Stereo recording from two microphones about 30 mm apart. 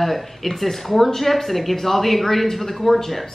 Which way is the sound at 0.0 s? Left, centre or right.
Centre.